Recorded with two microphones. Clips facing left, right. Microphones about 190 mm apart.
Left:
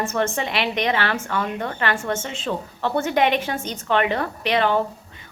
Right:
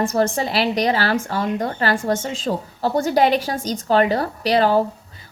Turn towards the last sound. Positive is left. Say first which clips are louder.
# right 4 dB
turn(degrees=-35)  # may be behind; listen again after turning